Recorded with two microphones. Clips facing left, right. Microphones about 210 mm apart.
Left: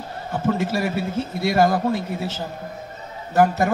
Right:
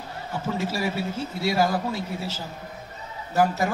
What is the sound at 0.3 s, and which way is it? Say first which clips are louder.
A man's voice: left 6 dB; 55° left (ahead or behind).